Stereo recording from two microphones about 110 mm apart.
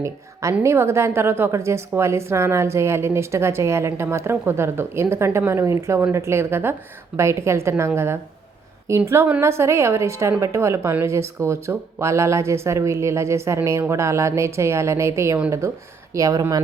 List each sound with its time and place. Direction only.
0.6 s speech: 25° right (ahead or behind)